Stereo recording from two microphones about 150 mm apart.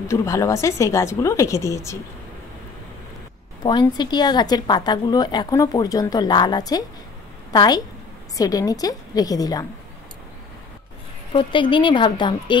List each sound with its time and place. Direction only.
0.1 s a woman's voice: 20° left (ahead or behind)
3.6 s a woman's voice: 30° left (ahead or behind)
11.3 s speech: 30° left (ahead or behind)